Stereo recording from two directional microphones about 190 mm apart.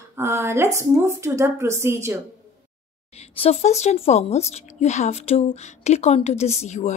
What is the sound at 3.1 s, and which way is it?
Speech, 30° left (ahead or behind).